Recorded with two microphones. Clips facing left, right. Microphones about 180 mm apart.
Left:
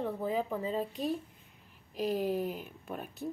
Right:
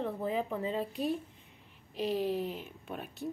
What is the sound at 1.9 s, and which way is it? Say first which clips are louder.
Speech: even; 45° left (ahead or behind).